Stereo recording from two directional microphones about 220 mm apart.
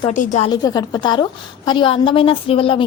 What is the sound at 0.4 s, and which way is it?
A woman's voice, 15° left (ahead or behind).